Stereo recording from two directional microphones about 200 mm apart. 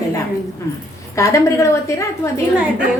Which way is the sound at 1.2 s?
15° left (ahead or behind).